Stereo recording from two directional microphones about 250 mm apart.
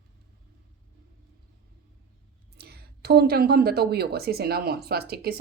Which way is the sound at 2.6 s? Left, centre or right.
Right.